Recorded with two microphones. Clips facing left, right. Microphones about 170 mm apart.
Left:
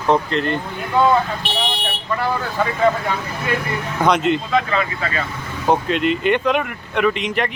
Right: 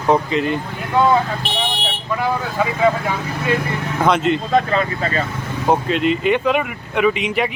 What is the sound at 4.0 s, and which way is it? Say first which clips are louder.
Speech: even; centre (ahead or behind).